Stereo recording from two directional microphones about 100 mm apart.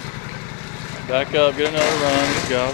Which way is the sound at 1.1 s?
15° left (ahead or behind).